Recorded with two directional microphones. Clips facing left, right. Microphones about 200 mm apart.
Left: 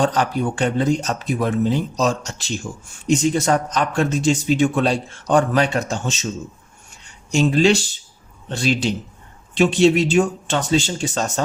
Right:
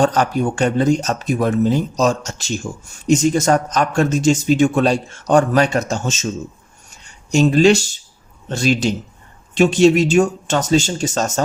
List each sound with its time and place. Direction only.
0.0 s a man's voice: 45° right (ahead or behind)
7.3 s a man's voice: 45° right (ahead or behind)